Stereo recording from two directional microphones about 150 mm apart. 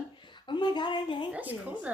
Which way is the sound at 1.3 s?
10° right (ahead or behind).